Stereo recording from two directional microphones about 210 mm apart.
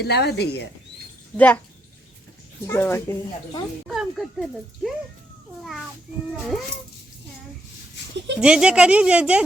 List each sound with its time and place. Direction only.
0.0 s speech: 50° left (ahead or behind)
2.6 s speech: 10° left (ahead or behind)
3.8 s speech: centre (ahead or behind)
6.4 s speech: centre (ahead or behind)
8.4 s speech: 5° right (ahead or behind)